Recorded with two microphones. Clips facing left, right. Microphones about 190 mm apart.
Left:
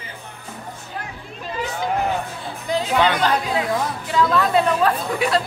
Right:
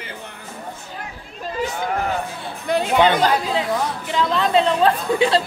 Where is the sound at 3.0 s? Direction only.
25° right (ahead or behind).